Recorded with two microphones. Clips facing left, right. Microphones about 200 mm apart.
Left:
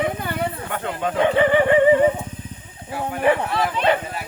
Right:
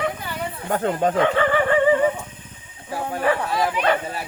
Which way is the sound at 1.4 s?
20° left (ahead or behind).